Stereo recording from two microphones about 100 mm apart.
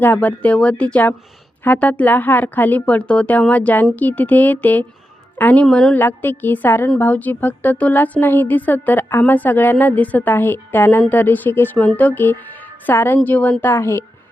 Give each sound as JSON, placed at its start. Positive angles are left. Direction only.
{"t": 0.0, "sound": "a woman's voice", "side_deg": 20}
{"t": 5.6, "sound": "a woman's voice", "side_deg": 5}
{"t": 5.9, "sound": "a woman's voice", "side_deg": 20}